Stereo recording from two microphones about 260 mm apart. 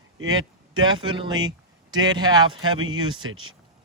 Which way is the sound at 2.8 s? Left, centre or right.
Right.